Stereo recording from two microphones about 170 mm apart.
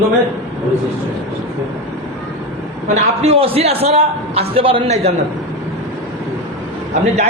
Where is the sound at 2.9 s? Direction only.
40° right (ahead or behind).